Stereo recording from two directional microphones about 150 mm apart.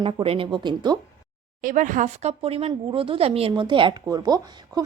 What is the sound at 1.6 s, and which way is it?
Speech, 60° right (ahead or behind).